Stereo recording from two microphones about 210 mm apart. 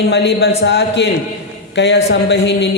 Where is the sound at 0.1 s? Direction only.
55° left (ahead or behind).